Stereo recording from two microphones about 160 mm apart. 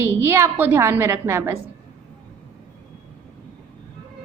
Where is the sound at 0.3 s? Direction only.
15° right (ahead or behind).